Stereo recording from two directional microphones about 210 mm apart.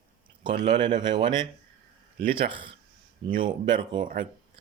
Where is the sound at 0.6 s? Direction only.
25° right (ahead or behind).